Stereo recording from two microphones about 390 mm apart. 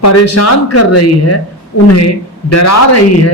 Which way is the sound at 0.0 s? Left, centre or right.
Left.